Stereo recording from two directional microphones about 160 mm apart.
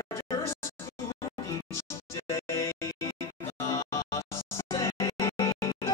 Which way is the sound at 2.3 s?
15° left (ahead or behind).